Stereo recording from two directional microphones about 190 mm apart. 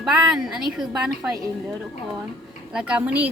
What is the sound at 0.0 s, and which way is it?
Speech, centre (ahead or behind).